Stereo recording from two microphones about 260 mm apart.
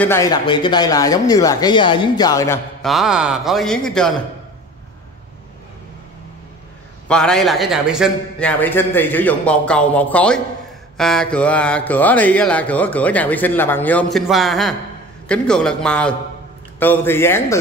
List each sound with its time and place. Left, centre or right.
0.0 s speech: centre
2.8 s a man's voice: centre
7.1 s a man's voice: centre